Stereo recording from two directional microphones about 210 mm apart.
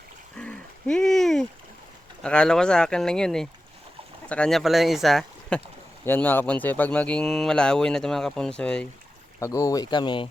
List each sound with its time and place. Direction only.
0.3 s a sound: 5° left (ahead or behind)
2.2 s speech: 5° left (ahead or behind)
9.4 s speech: 15° left (ahead or behind)